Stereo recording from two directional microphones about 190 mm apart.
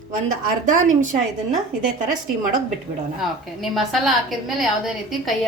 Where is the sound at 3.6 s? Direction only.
Centre (ahead or behind).